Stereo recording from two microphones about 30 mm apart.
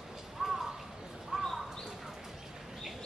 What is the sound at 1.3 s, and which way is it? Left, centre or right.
Bird, right.